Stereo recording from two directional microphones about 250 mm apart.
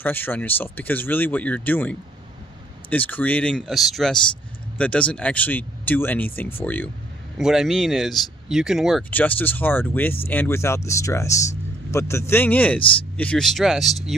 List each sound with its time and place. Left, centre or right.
0.0 s speech: centre